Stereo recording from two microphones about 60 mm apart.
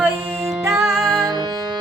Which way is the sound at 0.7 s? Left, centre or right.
Right.